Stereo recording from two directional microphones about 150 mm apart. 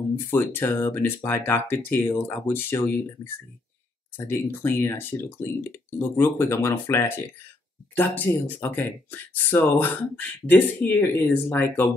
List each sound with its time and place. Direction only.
0.3 s speech: 15° left (ahead or behind)
4.3 s speech: 15° left (ahead or behind)